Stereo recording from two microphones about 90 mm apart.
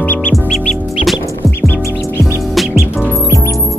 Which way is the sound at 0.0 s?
20° left (ahead or behind).